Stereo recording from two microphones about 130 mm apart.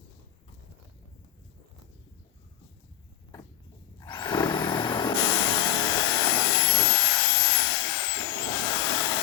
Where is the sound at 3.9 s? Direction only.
35° left (ahead or behind).